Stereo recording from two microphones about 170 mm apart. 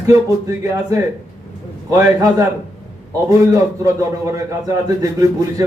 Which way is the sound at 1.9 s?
20° right (ahead or behind).